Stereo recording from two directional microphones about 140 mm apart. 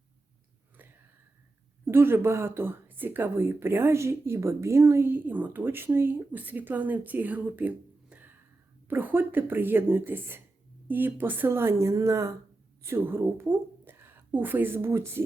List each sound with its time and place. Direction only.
1.8 s a woman's voice: 15° right (ahead or behind)